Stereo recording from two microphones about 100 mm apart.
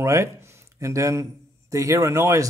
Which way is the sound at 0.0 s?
30° right (ahead or behind).